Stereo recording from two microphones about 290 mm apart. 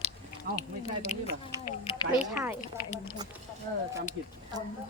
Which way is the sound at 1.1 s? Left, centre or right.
Left.